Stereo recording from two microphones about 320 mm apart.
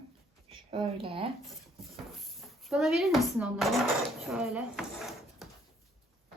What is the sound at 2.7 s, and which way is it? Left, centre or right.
Speech, centre.